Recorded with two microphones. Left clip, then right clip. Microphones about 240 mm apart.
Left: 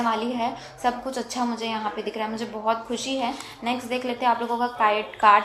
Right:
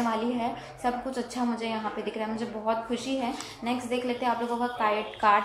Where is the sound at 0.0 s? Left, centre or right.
Left.